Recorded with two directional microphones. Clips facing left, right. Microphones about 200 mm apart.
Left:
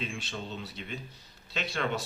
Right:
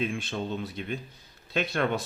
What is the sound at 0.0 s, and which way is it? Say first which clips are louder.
Speech: right 7 dB; 55° right (ahead or behind).